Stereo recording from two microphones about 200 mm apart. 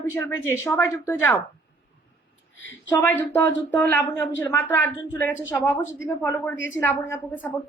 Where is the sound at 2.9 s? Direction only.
10° left (ahead or behind).